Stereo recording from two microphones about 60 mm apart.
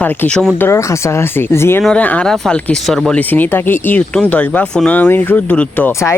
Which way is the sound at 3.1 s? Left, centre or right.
Left.